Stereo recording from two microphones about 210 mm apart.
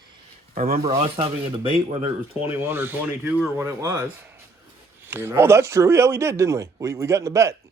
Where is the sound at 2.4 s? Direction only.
10° right (ahead or behind).